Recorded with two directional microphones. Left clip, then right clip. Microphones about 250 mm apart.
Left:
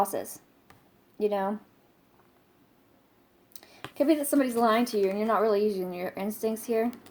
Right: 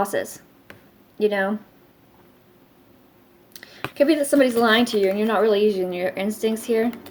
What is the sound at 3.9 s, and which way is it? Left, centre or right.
Speech, left.